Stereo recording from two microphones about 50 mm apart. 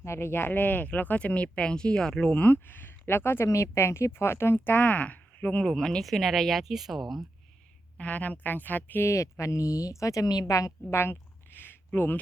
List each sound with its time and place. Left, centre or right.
0.0 s speech: left; by 2.3 s centre
2.3 s speech: left
3.4 s speech: left
5.6 s speech: centre
7.9 s speech: left
9.0 s speech: left
10.9 s a sound: left
11.9 s speech: left